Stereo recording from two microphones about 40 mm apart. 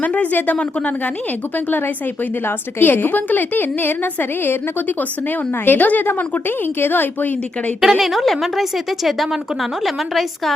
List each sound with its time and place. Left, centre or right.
0.0 s a woman's voice: left
0.5 s a woman's voice: left
2.7 s a woman's voice: left
7.8 s a woman's voice: centre